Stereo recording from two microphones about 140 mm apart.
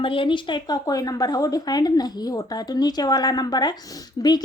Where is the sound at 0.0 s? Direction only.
40° left (ahead or behind).